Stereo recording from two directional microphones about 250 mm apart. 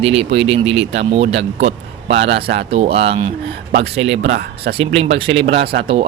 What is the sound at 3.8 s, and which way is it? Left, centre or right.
Speech, right.